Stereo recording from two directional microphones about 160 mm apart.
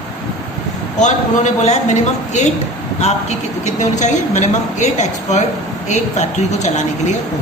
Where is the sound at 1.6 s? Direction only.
45° left (ahead or behind).